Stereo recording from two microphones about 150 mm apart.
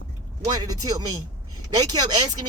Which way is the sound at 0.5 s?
25° right (ahead or behind).